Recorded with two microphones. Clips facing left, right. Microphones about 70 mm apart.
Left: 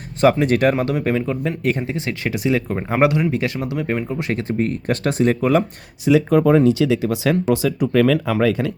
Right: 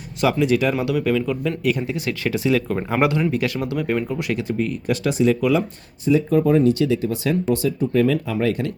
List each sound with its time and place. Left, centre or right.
0.2 s speech: left; by 4.2 s centre
4.2 s speech: left
6.1 s speech: left